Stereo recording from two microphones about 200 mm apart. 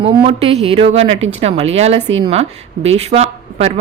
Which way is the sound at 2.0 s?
65° right (ahead or behind).